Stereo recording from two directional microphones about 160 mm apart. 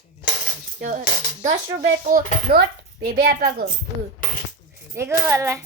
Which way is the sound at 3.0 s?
75° right (ahead or behind).